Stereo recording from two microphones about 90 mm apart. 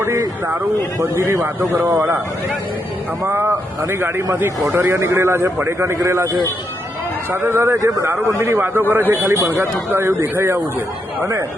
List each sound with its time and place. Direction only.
0.0 s a man's voice: 30° right (ahead or behind)
3.2 s a man's voice: 25° right (ahead or behind)
4.8 s a man's voice: 30° right (ahead or behind)
7.3 s a man's voice: 25° right (ahead or behind)
7.8 s speech: 40° right (ahead or behind)
8.3 s a man's voice: 30° right (ahead or behind)